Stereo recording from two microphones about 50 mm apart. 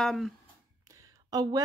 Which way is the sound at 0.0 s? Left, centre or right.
Centre.